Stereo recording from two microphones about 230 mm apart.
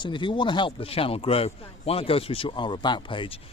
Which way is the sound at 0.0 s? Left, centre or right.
Left.